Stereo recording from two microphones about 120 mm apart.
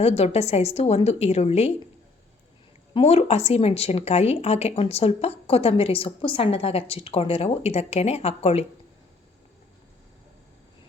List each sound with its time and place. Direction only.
0.0 s speech: 60° left (ahead or behind)
2.9 s speech: 60° left (ahead or behind)